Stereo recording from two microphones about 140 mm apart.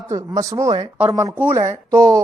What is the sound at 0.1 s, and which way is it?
Speech, 25° right (ahead or behind).